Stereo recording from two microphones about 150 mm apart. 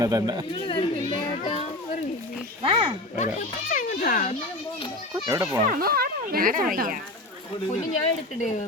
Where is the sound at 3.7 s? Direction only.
65° left (ahead or behind).